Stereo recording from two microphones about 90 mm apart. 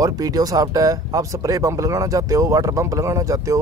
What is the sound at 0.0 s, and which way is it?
Speech, 45° right (ahead or behind).